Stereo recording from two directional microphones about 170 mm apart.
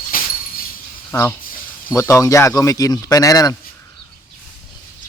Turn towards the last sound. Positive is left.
turn(degrees=20)  # may be behind; listen again after turning